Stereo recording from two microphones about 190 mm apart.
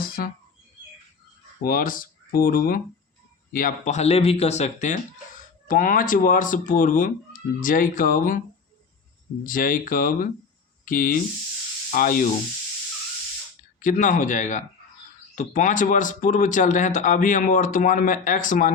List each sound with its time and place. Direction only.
0.2 s speech: 50° left (ahead or behind)
1.6 s speech: 50° left (ahead or behind)
9.5 s speech: 45° left (ahead or behind)
13.7 s speech: 45° left (ahead or behind)